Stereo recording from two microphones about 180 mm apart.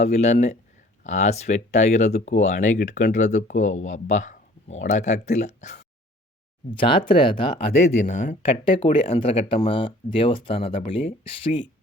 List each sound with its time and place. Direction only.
0.0 s speech: 40° left (ahead or behind)
6.7 s speech: 30° left (ahead or behind)
8.0 s speech: 45° left (ahead or behind)
8.6 s speech: 30° left (ahead or behind)